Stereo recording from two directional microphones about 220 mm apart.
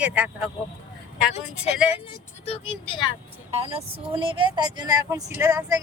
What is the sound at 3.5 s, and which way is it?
Speech, 25° right (ahead or behind).